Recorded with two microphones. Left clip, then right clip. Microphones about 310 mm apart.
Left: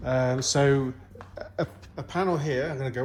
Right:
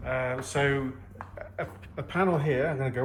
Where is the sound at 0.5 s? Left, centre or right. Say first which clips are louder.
Left 3 dB; left.